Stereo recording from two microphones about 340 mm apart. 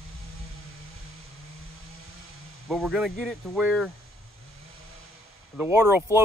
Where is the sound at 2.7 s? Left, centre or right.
Centre.